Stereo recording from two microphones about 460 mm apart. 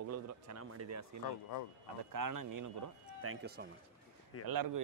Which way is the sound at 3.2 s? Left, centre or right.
Right.